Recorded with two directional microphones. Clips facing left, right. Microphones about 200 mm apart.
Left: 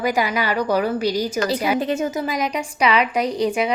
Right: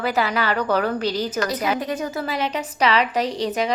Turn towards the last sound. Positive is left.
turn(degrees=10)  # may be behind; listen again after turning